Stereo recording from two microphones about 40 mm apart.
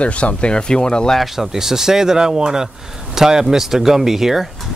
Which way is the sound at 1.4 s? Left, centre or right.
Centre.